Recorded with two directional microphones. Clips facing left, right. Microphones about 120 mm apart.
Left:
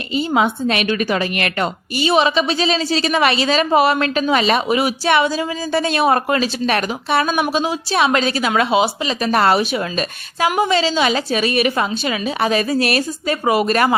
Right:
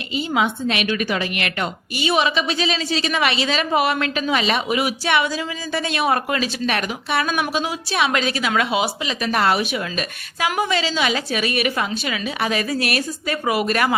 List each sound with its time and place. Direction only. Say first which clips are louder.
0.3 s a woman's voice: left 3 dB; 40° left (ahead or behind)